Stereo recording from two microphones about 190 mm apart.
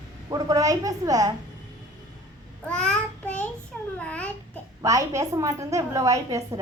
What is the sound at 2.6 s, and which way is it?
Child singing, 5° left (ahead or behind).